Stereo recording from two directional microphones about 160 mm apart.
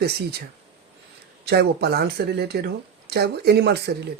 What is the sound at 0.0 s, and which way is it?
Speech, 90° right.